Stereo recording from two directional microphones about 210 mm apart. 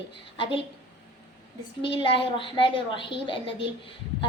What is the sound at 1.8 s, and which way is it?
A woman's voice, 25° left (ahead or behind).